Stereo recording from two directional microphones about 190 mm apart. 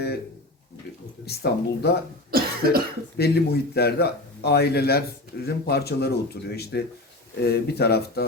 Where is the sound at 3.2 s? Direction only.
55° left (ahead or behind).